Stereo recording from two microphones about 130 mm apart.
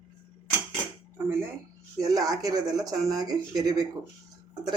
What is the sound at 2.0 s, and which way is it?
Speech, 30° right (ahead or behind).